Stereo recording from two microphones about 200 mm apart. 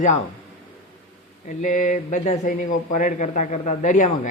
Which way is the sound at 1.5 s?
40° left (ahead or behind).